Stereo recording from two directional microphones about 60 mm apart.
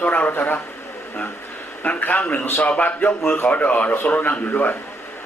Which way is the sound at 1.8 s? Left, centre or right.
Left.